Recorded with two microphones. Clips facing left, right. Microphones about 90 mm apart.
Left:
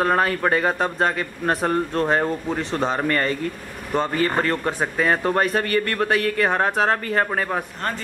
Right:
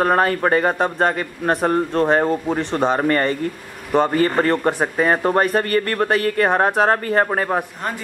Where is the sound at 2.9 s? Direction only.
15° right (ahead or behind).